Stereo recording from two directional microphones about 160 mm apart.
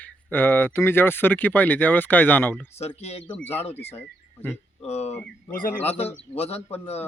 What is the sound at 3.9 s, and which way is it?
Speech, 15° left (ahead or behind).